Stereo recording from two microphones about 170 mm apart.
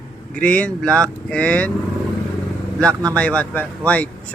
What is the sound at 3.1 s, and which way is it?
Speech, 5° left (ahead or behind).